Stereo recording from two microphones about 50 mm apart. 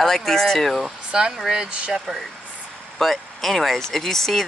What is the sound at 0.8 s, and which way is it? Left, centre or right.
Speech, centre.